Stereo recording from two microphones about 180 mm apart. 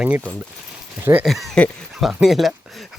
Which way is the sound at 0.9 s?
10° right (ahead or behind).